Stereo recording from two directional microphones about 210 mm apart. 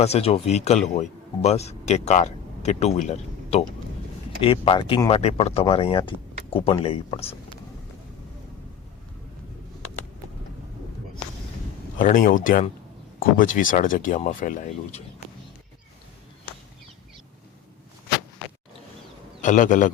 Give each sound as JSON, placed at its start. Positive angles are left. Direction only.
{"t": 0.0, "sound": "speech", "side_deg": 30}
{"t": 11.9, "sound": "speech", "side_deg": 40}
{"t": 19.4, "sound": "speech", "side_deg": 35}